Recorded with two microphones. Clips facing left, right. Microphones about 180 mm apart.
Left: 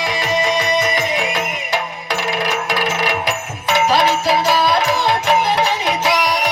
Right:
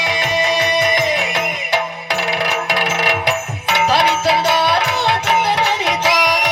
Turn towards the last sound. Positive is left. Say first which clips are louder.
# even
turn(degrees=-90)